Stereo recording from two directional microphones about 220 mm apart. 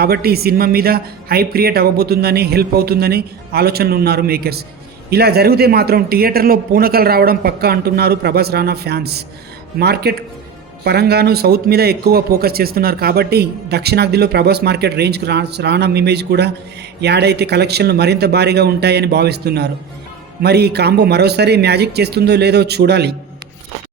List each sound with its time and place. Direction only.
0.0 s a man's voice: 45° right (ahead or behind)